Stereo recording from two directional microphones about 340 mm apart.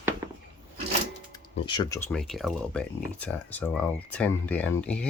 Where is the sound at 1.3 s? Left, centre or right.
Centre.